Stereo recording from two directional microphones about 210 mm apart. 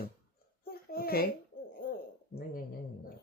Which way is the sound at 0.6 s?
45° left (ahead or behind).